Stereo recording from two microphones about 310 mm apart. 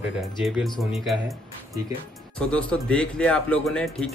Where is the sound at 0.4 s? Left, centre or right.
Centre.